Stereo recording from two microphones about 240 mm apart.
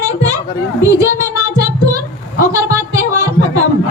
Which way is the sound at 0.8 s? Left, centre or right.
Centre.